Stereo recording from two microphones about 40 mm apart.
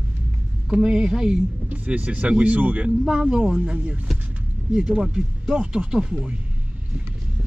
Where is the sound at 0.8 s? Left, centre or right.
Centre.